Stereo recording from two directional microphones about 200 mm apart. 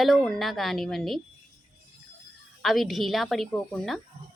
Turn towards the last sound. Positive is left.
turn(degrees=0)  # may be behind; listen again after turning